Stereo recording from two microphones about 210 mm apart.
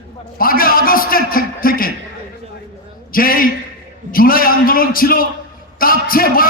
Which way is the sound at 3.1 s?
45° left (ahead or behind).